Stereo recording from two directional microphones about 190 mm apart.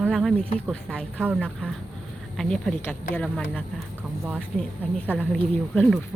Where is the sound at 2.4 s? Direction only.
5° left (ahead or behind).